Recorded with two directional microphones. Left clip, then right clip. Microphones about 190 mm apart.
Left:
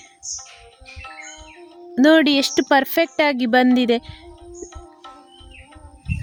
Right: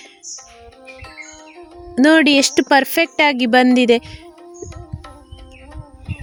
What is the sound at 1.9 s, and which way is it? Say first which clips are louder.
Speech: right 2 dB; 10° right (ahead or behind).